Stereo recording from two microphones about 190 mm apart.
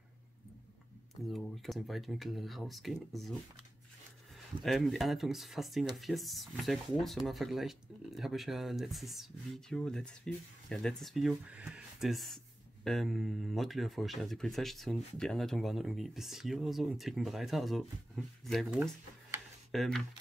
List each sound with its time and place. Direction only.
1.2 s speech: centre (ahead or behind)
4.6 s speech: centre (ahead or behind)